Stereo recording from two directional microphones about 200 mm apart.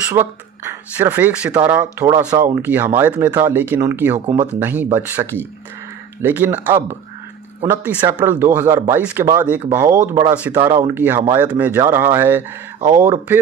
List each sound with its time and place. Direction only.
0.1 s speech: 10° right (ahead or behind)